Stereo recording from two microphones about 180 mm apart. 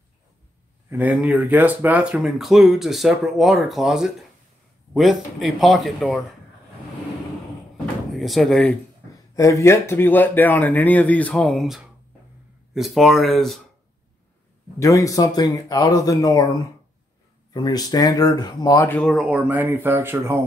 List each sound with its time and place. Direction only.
0.8 s speech: 10° right (ahead or behind)
7.7 s door: centre (ahead or behind)
9.1 s speech: 20° left (ahead or behind); by 13.6 s centre (ahead or behind)
14.8 s speech: 15° left (ahead or behind)
17.5 s speech: 20° left (ahead or behind); by 20.4 s 15° right (ahead or behind)